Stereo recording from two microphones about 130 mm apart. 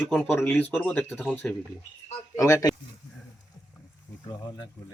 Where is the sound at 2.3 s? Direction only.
25° left (ahead or behind).